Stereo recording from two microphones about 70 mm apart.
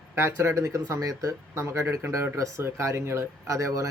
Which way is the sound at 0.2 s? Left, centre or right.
Right.